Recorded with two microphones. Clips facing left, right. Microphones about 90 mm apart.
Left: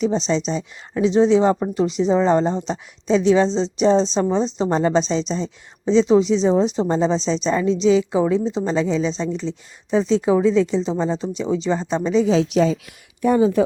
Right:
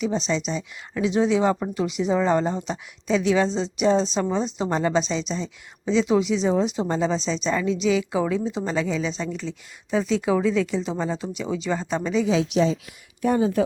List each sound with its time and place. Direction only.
0.0 s a woman's voice: 30° left (ahead or behind)